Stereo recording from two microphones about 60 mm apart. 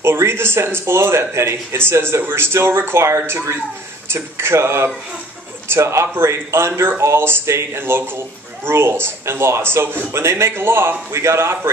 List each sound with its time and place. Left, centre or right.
0.0 s speech: right